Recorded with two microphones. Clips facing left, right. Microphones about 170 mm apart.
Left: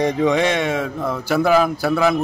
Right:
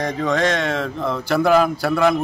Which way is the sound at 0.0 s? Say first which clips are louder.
Left 3 dB; 15° left (ahead or behind).